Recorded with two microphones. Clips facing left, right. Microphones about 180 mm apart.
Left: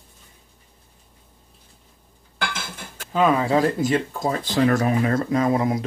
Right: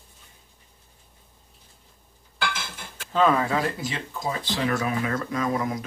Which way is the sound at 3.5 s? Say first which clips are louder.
Left 8 dB; 50° left (ahead or behind).